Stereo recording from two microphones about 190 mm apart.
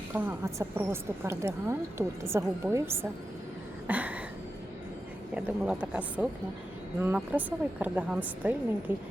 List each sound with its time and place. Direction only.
0.1 s a woman's voice: 10° right (ahead or behind)
3.8 s a sound: 10° right (ahead or behind)
5.3 s a woman's voice: 5° right (ahead or behind)